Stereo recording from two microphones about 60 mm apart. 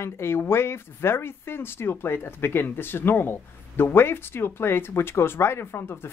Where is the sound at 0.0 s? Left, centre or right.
Left.